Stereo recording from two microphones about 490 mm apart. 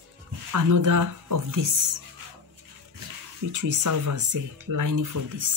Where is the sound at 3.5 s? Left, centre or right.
Right.